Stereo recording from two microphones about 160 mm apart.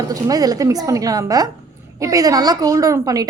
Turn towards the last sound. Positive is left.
turn(degrees=-20)  # may be behind; listen again after turning